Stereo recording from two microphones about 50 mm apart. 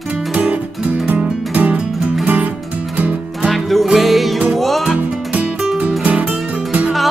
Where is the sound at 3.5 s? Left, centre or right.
Centre.